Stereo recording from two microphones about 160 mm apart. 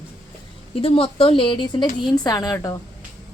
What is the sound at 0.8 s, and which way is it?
A woman's voice, 35° left (ahead or behind).